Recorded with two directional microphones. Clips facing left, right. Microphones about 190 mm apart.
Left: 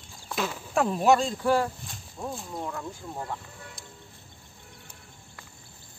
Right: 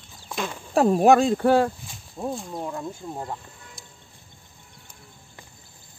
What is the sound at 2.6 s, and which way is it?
Speech, 20° right (ahead or behind).